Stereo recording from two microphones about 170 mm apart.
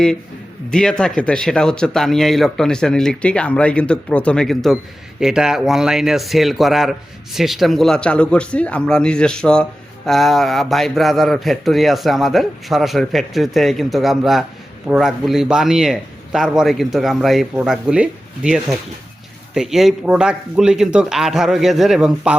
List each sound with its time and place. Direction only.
0.7 s a man's voice: 5° left (ahead or behind)